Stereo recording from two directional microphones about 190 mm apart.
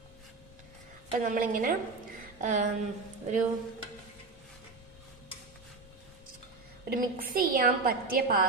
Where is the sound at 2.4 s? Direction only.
40° right (ahead or behind).